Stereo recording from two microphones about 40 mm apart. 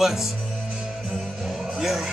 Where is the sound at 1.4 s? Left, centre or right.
Centre.